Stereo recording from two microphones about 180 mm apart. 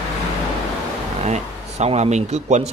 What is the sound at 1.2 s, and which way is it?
Speech, 40° right (ahead or behind).